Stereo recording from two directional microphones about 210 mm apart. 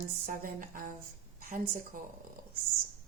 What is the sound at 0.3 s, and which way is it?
A woman's voice, 40° right (ahead or behind).